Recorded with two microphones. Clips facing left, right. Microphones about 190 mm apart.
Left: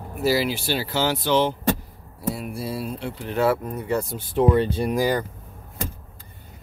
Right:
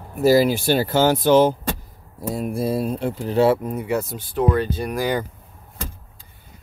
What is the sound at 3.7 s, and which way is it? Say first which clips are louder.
Speech: right 2 dB; 10° right (ahead or behind).